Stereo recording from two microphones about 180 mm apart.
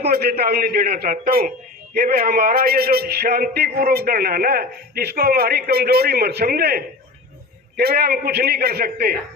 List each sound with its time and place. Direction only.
0.1 s a man's voice: 60° right (ahead or behind)